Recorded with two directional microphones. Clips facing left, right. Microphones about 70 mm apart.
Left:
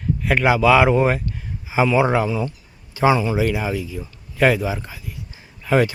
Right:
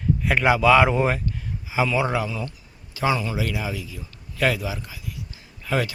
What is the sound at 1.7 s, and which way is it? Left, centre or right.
Speech, left.